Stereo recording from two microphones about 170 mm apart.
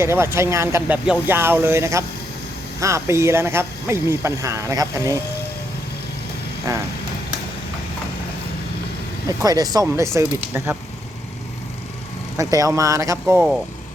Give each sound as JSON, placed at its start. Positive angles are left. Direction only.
{"t": 0.0, "sound": "speech", "side_deg": -15}
{"t": 6.7, "sound": "speech", "side_deg": -20}
{"t": 9.2, "sound": "speech", "side_deg": -20}
{"t": 12.4, "sound": "speech", "side_deg": -20}